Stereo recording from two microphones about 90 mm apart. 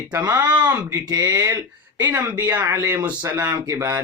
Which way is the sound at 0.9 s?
40° right (ahead or behind).